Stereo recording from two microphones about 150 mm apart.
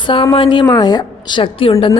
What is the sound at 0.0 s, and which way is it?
A woman's voice, 35° left (ahead or behind).